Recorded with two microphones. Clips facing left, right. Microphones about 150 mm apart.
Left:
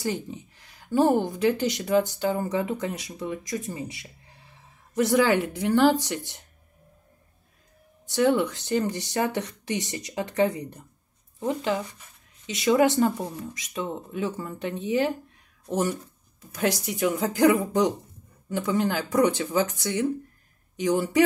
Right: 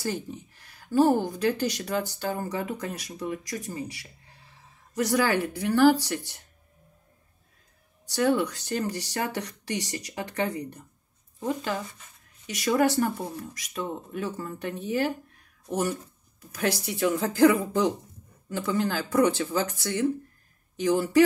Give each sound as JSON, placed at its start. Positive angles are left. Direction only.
{"t": 0.0, "sound": "a sound", "side_deg": 20}
{"t": 1.3, "sound": "speech", "side_deg": 20}
{"t": 8.1, "sound": "speech", "side_deg": 20}